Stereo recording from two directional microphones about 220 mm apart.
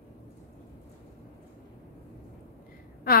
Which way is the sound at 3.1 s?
40° left (ahead or behind).